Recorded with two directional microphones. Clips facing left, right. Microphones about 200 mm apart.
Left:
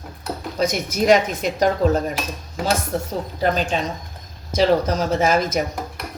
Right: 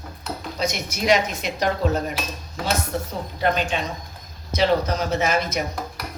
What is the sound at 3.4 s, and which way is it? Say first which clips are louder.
A woman's voice: left 2 dB; 40° left (ahead or behind).